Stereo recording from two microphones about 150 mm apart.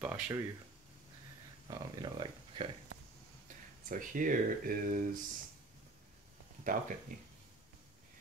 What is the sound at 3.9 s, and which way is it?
Speech, 65° right (ahead or behind).